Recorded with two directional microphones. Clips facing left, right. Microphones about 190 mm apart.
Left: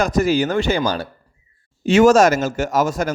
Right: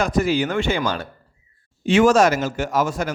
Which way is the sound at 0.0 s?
40° left (ahead or behind).